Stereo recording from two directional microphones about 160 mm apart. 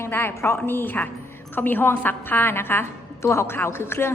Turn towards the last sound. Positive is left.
turn(degrees=15)  # may be behind; listen again after turning